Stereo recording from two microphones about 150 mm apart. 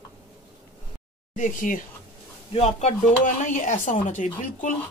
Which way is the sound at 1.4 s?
60° left (ahead or behind).